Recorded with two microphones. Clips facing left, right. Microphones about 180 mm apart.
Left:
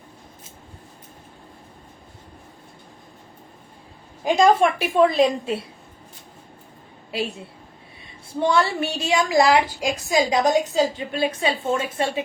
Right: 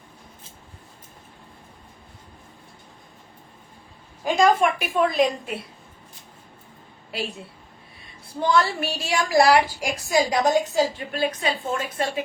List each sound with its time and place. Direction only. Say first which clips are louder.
4.3 s a woman's voice: left 2 dB; 25° left (ahead or behind)
8.4 s a woman's voice: left 1 dB; 25° left (ahead or behind)